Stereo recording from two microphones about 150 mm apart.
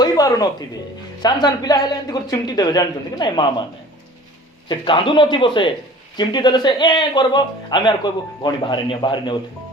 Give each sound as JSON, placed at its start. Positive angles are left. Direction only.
{"t": 0.0, "sound": "speech", "side_deg": 25}
{"t": 4.7, "sound": "speech", "side_deg": 35}